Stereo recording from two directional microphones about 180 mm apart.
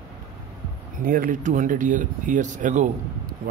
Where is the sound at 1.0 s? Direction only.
50° right (ahead or behind).